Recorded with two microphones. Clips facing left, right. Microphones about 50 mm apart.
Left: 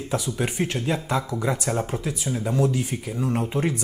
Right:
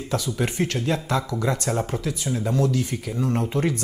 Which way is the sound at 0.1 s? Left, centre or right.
Centre.